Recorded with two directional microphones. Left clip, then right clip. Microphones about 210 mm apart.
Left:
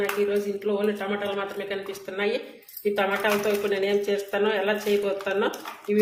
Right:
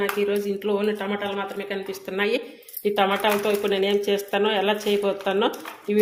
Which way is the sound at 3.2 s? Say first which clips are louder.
Right 2 dB; 40° right (ahead or behind).